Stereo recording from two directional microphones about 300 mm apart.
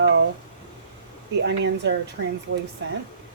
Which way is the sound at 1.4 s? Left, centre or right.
Right.